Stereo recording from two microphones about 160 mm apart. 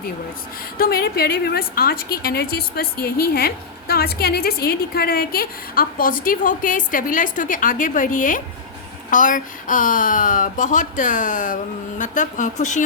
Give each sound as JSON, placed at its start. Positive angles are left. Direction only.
{"t": 0.8, "sound": "a woman's voice", "side_deg": 75}